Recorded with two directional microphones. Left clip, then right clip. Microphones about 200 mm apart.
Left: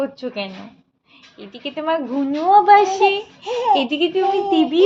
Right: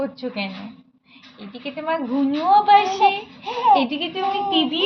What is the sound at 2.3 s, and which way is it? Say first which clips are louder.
A woman's voice: left 3 dB; 35° left (ahead or behind).